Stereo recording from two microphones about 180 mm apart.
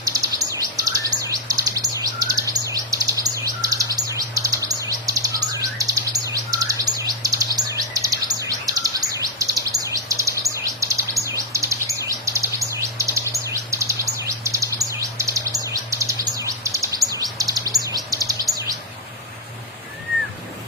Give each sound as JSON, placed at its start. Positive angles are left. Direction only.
{"t": 0.0, "sound": "chirp", "side_deg": -20}
{"t": 5.8, "sound": "bird", "side_deg": -20}
{"t": 9.8, "sound": "chirp", "side_deg": -20}
{"t": 17.8, "sound": "bird", "side_deg": -20}